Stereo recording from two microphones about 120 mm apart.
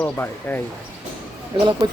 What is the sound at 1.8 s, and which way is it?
Speech, 35° right (ahead or behind).